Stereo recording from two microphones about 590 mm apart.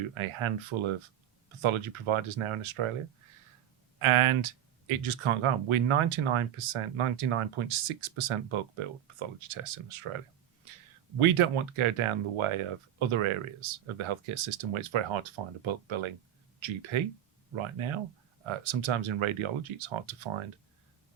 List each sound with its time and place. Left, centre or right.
0.1 s speech: right
4.0 s speech: right
11.2 s speech: right